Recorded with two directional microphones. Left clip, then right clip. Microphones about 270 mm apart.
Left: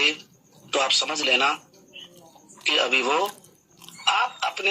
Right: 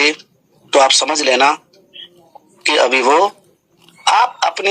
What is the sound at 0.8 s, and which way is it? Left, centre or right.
Speech, right.